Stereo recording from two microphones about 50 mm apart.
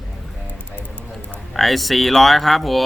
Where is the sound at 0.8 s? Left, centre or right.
Left.